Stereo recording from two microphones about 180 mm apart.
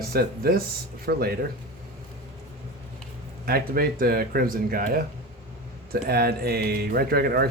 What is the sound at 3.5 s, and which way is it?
Speech, 55° right (ahead or behind).